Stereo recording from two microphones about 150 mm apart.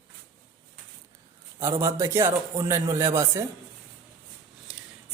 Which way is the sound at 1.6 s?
20° right (ahead or behind).